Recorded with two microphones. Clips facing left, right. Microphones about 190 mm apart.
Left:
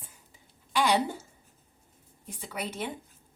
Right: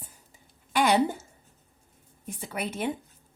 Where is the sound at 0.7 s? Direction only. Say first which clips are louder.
Right 2 dB; 50° right (ahead or behind).